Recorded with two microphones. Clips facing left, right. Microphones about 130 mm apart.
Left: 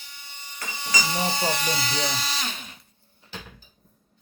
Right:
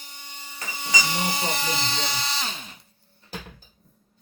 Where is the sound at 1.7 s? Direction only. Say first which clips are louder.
Even; 25° right (ahead or behind).